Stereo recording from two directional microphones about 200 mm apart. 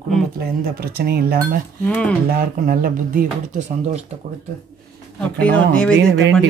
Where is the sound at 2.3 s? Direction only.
45° right (ahead or behind).